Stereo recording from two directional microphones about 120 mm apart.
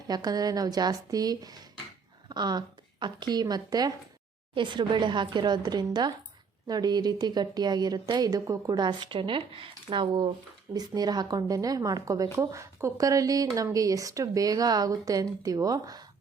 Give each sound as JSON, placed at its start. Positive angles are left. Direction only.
{"t": 0.1, "sound": "a woman's voice", "side_deg": -35}